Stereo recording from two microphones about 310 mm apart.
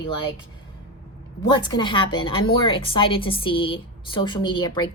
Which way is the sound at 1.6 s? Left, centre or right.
Centre.